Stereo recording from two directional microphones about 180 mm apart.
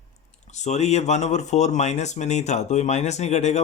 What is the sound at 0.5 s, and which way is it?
Speech, 40° left (ahead or behind).